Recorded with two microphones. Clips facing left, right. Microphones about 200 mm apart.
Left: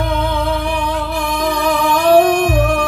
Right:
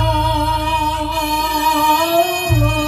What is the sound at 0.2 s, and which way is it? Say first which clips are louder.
Music: left 1 dB; 55° left (ahead or behind).